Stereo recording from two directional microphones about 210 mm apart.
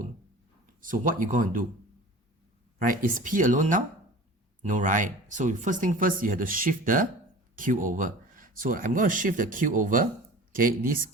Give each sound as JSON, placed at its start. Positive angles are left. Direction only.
{"t": 0.8, "sound": "speech", "side_deg": -40}
{"t": 2.7, "sound": "speech", "side_deg": -40}